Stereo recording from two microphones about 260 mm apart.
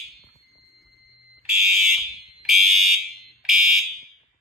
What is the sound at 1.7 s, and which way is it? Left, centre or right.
Fire alarm, centre.